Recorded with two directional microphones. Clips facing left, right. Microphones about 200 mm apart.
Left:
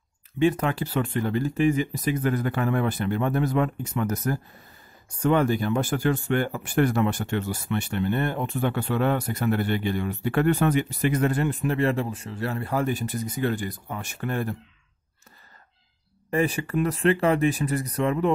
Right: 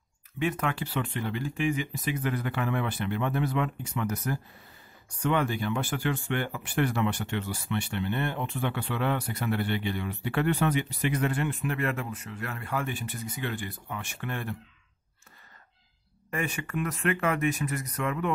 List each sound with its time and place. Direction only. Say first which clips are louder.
0.4 s speech: left 7 dB; 35° left (ahead or behind)
16.3 s speech: left 8 dB; 35° left (ahead or behind)